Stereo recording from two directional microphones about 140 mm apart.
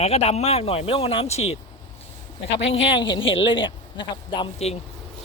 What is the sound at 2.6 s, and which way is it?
A man's voice, 35° left (ahead or behind).